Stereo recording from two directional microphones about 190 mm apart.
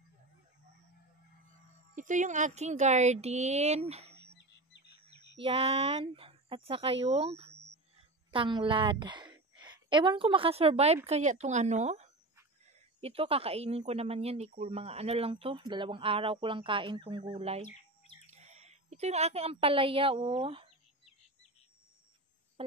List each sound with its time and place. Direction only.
2.0 s speech: 40° right (ahead or behind)
4.4 s bird: 65° left (ahead or behind)
5.4 s a woman's voice: 30° right (ahead or behind)
22.6 s a sound: 30° right (ahead or behind)